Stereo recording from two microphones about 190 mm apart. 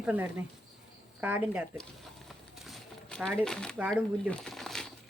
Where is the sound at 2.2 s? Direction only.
Centre (ahead or behind).